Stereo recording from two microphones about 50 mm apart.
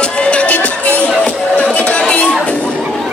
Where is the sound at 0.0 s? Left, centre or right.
Left.